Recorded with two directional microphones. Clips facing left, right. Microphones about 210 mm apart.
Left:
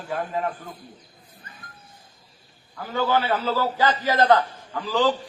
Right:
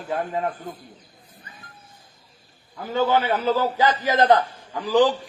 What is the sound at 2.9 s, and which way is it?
A man's voice, 20° right (ahead or behind).